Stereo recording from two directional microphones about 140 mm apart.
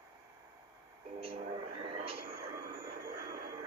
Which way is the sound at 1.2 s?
40° right (ahead or behind).